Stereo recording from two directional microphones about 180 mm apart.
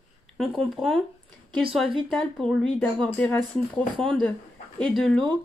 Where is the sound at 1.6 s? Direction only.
55° right (ahead or behind).